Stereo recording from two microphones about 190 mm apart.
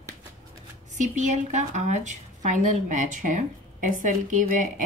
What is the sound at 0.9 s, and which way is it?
A woman's voice, 40° right (ahead or behind).